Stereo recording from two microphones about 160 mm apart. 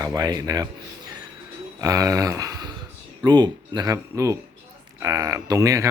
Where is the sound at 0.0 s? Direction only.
25° right (ahead or behind).